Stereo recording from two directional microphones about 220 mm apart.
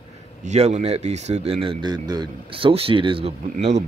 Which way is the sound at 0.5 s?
30° right (ahead or behind).